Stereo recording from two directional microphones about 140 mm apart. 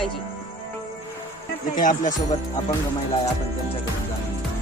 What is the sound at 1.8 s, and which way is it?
Speech, 70° left (ahead or behind).